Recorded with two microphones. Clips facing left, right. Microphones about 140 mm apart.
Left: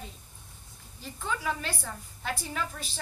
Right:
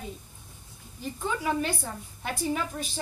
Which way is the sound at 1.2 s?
10° right (ahead or behind).